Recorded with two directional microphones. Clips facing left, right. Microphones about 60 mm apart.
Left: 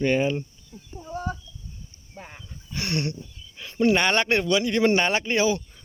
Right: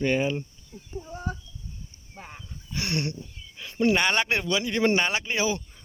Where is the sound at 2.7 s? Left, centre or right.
Centre.